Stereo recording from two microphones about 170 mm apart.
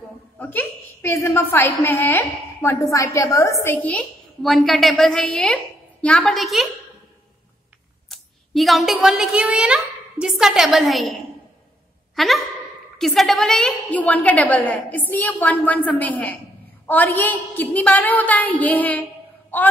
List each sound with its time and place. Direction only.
0.4 s a woman's voice: 10° left (ahead or behind)
8.1 s a woman's voice: centre (ahead or behind)